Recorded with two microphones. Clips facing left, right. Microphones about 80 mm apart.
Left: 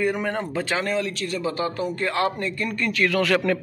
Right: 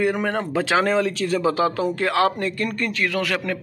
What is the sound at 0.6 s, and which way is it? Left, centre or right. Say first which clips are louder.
Speech: right 8 dB; right.